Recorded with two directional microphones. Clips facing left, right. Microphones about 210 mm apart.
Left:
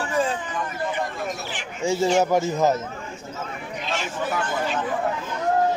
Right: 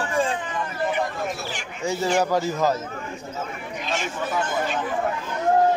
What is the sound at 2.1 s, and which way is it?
Speech, 20° left (ahead or behind).